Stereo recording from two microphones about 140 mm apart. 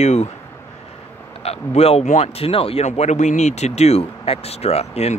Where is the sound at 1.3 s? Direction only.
45° left (ahead or behind).